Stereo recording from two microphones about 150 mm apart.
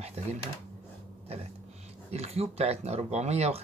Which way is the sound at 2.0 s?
45° right (ahead or behind).